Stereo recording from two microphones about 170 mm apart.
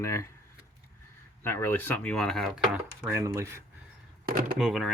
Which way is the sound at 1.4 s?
15° left (ahead or behind).